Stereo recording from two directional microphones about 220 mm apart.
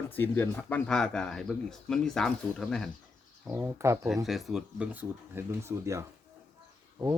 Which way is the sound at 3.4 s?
10° right (ahead or behind).